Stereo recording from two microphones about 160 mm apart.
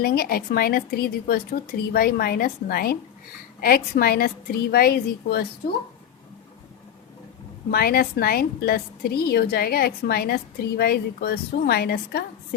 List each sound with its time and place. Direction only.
0.0 s a woman's voice: 75° left (ahead or behind)
7.7 s a woman's voice: 75° left (ahead or behind)